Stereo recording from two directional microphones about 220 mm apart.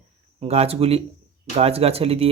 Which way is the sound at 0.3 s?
25° right (ahead or behind).